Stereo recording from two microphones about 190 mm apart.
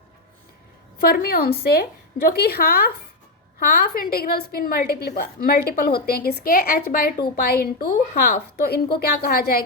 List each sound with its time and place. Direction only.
0.9 s a woman's voice: 55° left (ahead or behind)